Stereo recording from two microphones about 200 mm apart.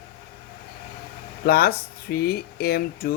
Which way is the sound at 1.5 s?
50° left (ahead or behind).